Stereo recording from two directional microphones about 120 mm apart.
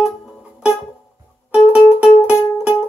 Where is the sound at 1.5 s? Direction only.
10° right (ahead or behind).